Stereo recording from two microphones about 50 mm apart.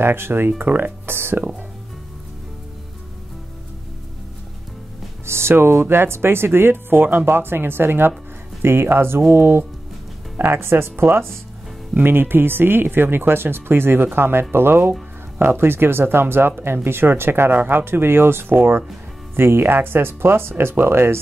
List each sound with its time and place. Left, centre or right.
0.0 s speech: right
0.7 s speech: right
1.0 s speech: right
5.2 s speech: right